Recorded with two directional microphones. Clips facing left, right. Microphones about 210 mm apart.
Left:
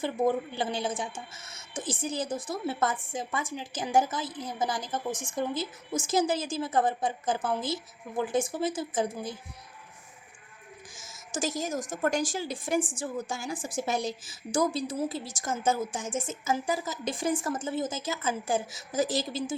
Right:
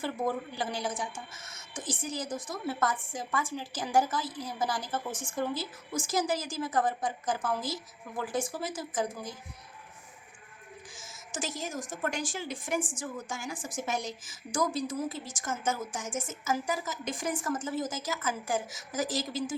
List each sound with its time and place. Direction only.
0.0 s a woman's voice: 25° left (ahead or behind)
11.3 s a woman's voice: 40° left (ahead or behind)